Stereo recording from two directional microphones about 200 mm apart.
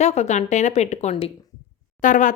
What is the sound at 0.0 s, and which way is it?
Speech, 35° left (ahead or behind).